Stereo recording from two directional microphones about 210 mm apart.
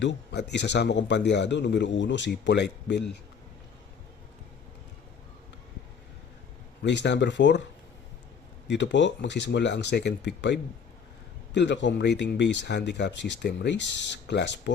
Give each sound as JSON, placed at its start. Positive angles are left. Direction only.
{"t": 0.0, "sound": "speech", "side_deg": 55}
{"t": 6.8, "sound": "speech", "side_deg": 55}
{"t": 8.6, "sound": "speech", "side_deg": 55}